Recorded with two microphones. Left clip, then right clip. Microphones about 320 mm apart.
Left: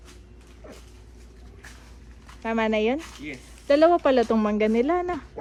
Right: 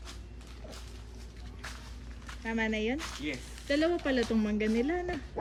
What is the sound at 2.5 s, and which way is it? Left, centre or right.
Speech, centre.